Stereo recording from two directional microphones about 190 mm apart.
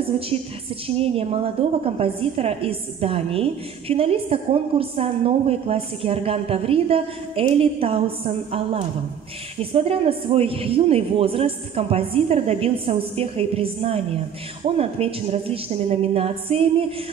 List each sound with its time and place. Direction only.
0.8 s a woman's voice: 30° right (ahead or behind)